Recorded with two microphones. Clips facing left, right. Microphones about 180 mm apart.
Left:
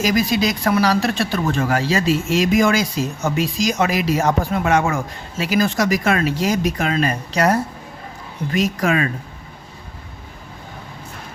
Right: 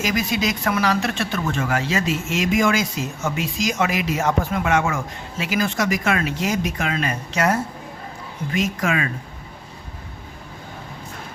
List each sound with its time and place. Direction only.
0.0 s speech: 35° left (ahead or behind)